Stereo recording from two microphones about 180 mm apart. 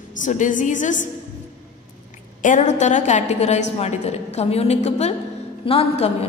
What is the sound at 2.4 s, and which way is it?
A woman's voice, 45° left (ahead or behind).